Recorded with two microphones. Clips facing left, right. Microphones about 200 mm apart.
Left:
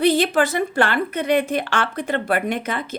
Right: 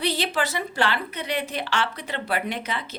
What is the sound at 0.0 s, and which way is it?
A woman's voice, 50° left (ahead or behind).